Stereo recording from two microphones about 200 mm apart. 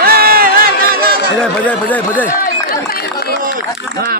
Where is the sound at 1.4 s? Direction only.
5° left (ahead or behind).